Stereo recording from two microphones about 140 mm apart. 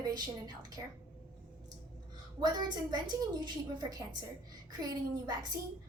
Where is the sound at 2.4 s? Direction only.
30° right (ahead or behind).